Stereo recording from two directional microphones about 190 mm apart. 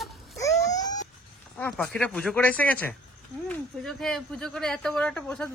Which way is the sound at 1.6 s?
5° left (ahead or behind).